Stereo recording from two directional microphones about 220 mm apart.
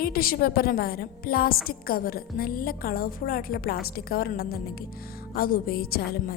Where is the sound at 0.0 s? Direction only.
40° left (ahead or behind).